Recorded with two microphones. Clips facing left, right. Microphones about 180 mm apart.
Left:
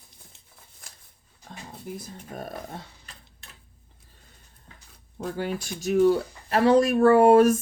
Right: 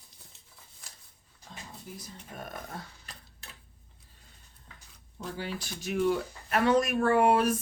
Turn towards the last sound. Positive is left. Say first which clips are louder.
# left 8 dB
turn(degrees=45)  # may be behind; listen again after turning